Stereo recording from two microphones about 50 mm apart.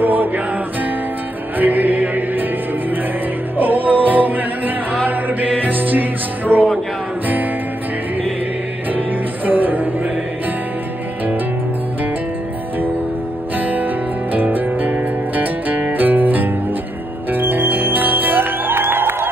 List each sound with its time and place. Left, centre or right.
0.0 s music: right
1.6 s music: right
3.5 s music: right
9.5 s music: right
13.6 s music: right
17.3 s music: right